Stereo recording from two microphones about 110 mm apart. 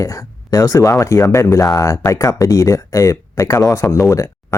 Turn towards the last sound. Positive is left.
turn(degrees=25)  # may be behind; listen again after turning